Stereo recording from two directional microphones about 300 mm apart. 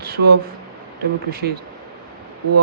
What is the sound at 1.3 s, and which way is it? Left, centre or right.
Speech, right.